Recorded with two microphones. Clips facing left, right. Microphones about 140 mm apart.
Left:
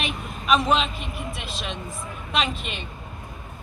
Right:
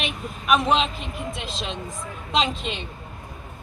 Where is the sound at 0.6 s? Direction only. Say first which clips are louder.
Right 1 dB; 25° right (ahead or behind).